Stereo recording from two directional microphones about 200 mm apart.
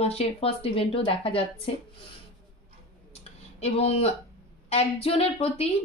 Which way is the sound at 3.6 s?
30° left (ahead or behind).